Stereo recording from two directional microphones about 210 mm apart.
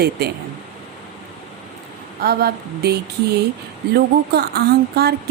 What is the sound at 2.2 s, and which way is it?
A woman's voice, 45° right (ahead or behind).